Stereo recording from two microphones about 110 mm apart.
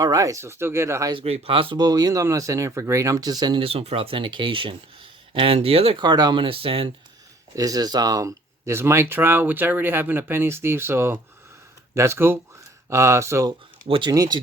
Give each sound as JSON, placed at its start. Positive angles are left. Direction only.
{"t": 0.0, "sound": "speech", "side_deg": -35}
{"t": 1.2, "sound": "speech", "side_deg": -60}
{"t": 1.8, "sound": "speech", "side_deg": -35}
{"t": 3.6, "sound": "speech", "side_deg": -60}
{"t": 6.0, "sound": "speech", "side_deg": -40}
{"t": 7.5, "sound": "speech", "side_deg": -35}
{"t": 13.8, "sound": "speech", "side_deg": -55}
{"t": 14.1, "sound": "speech", "side_deg": -35}